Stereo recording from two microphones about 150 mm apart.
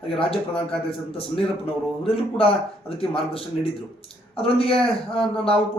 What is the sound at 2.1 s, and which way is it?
Speech, 40° left (ahead or behind).